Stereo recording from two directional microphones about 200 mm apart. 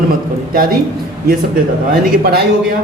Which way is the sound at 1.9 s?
50° right (ahead or behind).